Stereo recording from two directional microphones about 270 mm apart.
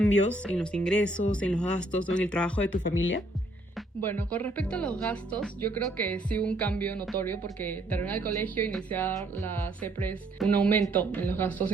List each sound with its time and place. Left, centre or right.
0.0 s speech: centre
4.0 s speech: centre